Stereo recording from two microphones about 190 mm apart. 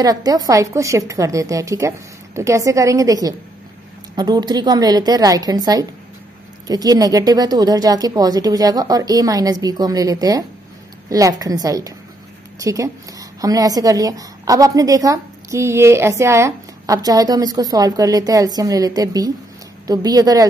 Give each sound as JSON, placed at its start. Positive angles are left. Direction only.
{"t": 0.0, "sound": "a woman's voice", "side_deg": -20}